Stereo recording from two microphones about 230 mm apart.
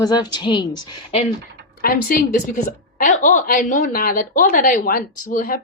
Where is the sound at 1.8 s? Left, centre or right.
Left.